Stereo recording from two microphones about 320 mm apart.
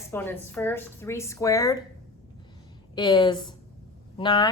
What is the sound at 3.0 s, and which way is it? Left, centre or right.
A woman's voice, centre.